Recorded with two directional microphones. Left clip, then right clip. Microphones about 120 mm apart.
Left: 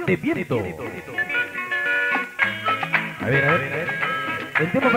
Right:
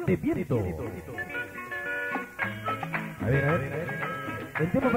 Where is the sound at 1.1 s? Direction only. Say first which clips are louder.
Left 12 dB; 35° left (ahead or behind).